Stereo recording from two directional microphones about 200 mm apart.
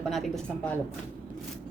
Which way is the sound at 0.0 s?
Centre (ahead or behind).